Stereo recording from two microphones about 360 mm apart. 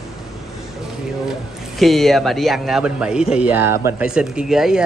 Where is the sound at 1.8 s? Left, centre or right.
Centre.